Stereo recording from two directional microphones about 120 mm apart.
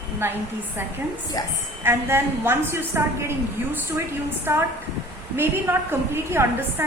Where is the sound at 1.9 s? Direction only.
20° right (ahead or behind).